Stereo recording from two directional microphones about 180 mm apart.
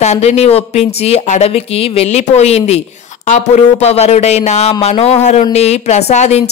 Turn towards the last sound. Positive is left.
turn(degrees=35)  # may be behind; listen again after turning